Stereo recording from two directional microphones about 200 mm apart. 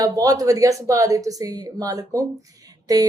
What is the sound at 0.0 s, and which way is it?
A woman's voice, 15° right (ahead or behind).